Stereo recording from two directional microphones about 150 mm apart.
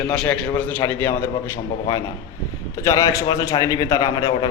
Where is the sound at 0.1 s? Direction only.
5° left (ahead or behind).